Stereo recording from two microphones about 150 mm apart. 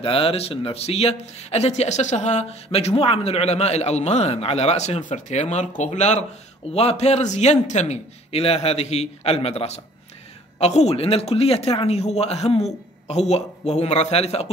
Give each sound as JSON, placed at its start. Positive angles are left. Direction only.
{"t": 0.0, "sound": "a man's voice", "side_deg": 40}